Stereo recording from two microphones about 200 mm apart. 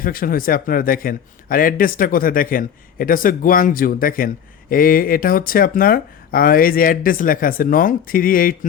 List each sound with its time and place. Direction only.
0.0 s a man's voice: 45° left (ahead or behind)